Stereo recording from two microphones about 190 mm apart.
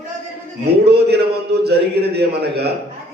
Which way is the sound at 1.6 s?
60° right (ahead or behind).